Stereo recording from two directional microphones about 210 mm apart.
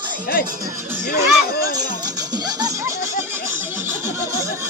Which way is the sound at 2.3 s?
20° right (ahead or behind).